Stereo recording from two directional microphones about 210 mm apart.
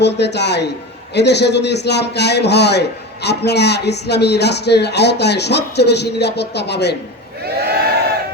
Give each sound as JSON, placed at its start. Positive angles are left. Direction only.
{"t": 0.0, "sound": "speech", "side_deg": 55}
{"t": 7.4, "sound": "crowd", "side_deg": -50}